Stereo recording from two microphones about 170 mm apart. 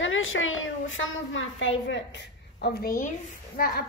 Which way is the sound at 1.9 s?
90° left.